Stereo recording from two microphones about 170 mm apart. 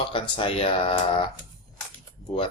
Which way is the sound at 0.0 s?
30° left (ahead or behind).